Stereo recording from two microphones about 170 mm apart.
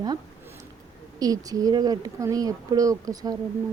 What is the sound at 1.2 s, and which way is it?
A woman's voice, 20° right (ahead or behind).